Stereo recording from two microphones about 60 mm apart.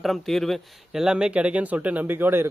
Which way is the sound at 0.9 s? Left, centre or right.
Centre.